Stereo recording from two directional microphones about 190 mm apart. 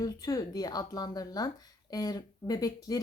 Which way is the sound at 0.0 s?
20° left (ahead or behind).